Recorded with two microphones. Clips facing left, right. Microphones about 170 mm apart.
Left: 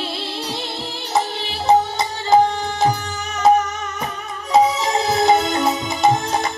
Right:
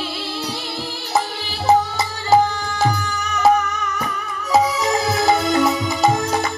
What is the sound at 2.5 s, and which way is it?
Music, 25° left (ahead or behind).